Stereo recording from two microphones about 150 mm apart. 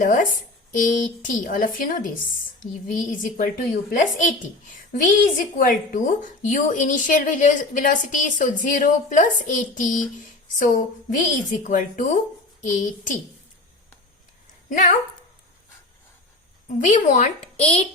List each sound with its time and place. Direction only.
0.0 s a woman's voice: 60° left (ahead or behind)
16.6 s a woman's voice: 55° left (ahead or behind)